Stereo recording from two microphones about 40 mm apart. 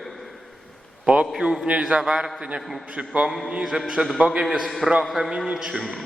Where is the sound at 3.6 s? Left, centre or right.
Centre.